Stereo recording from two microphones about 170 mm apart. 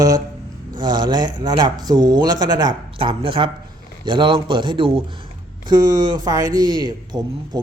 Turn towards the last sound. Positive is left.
turn(degrees=-25)  # may be behind; listen again after turning